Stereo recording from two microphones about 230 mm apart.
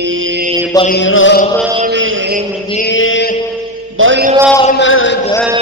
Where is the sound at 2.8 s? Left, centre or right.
Left.